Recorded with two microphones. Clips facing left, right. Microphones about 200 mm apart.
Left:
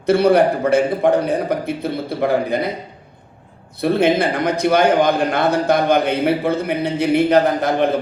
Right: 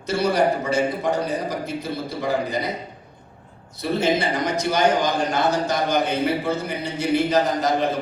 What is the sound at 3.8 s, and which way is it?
A man's voice, 55° left (ahead or behind).